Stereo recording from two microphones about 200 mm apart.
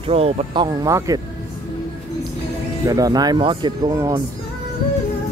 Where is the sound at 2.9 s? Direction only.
20° right (ahead or behind).